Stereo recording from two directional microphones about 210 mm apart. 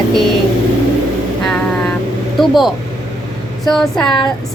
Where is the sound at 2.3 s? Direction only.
Centre (ahead or behind).